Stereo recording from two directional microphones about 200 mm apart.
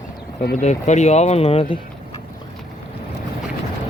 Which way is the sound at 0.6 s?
35° left (ahead or behind).